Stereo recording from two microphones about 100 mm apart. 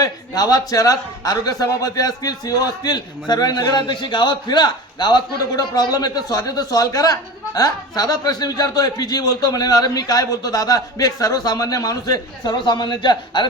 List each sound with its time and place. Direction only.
0.0 s a man's voice: 40° left (ahead or behind)